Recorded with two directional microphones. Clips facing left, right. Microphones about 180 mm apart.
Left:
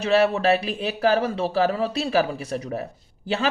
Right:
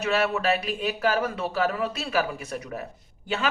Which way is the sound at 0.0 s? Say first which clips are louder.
Left 5 dB; 35° left (ahead or behind).